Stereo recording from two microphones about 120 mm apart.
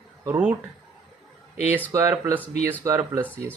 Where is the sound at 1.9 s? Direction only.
25° right (ahead or behind).